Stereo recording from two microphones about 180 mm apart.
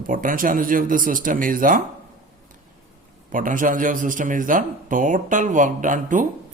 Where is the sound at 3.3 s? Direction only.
50° right (ahead or behind).